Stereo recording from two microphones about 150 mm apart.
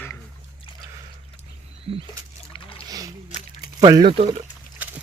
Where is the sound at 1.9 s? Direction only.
35° right (ahead or behind).